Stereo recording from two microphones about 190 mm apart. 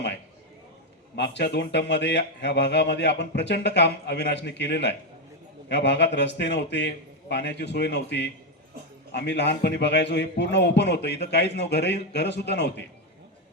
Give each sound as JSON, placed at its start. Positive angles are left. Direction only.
{"t": 1.1, "sound": "speech", "side_deg": 65}